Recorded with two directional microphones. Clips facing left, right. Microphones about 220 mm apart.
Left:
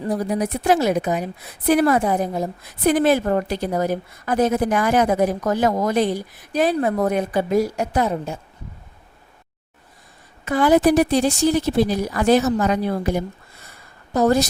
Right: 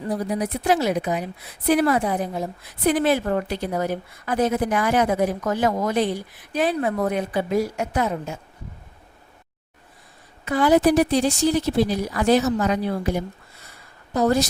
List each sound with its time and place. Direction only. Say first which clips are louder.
0.1 s a woman's voice: left 2 dB; 45° left (ahead or behind)
10.4 s a woman's voice: left 2 dB; 50° left (ahead or behind)